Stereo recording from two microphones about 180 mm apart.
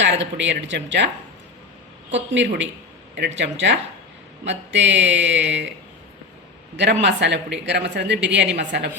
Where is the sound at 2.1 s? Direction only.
85° right.